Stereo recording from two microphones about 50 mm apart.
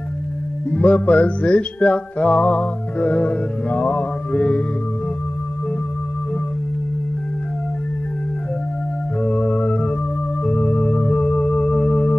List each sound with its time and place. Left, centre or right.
0.7 s music: left
9.2 s organ: left